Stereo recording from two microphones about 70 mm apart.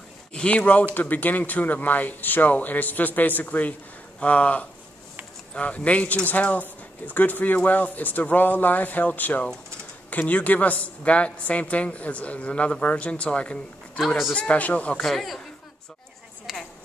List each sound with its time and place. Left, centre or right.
0.3 s speech: centre
13.9 s speech: centre
14.3 s speech: centre
15.0 s speech: centre
16.5 s a sound: centre